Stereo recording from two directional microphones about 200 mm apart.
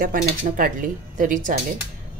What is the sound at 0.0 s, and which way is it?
Speech, 45° right (ahead or behind).